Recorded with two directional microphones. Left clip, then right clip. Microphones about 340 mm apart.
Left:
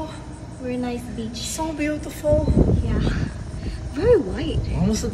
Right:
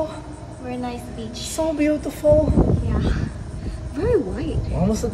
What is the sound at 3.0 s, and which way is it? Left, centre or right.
Crow, centre.